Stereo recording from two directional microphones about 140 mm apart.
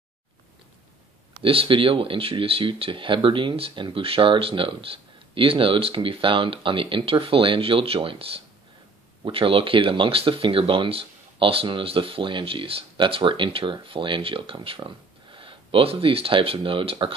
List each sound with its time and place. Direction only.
1.4 s speech: 40° right (ahead or behind)